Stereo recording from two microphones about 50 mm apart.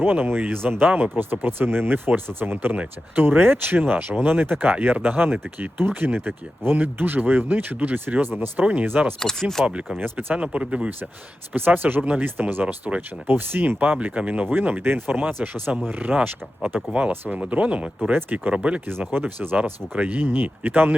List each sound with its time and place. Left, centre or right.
0.0 s speech: right
0.9 s speech: right
1.1 s speech: right
8.9 s speech: right
9.2 s speech: centre
10.0 s speech: right
11.5 s speech: right
12.6 s speech: right
13.2 s speech: right
15.3 s speech: right
18.5 s speech: right
18.9 s speech: right
19.2 s speech: right